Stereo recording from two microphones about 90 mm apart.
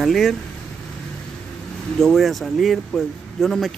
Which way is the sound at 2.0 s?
Centre (ahead or behind).